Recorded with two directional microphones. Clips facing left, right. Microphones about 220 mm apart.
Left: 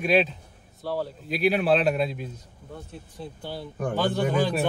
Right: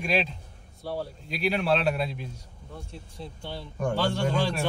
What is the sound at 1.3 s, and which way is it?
Speech, 5° left (ahead or behind).